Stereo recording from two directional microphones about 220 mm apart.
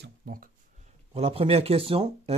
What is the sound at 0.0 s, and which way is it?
Speech, 40° right (ahead or behind).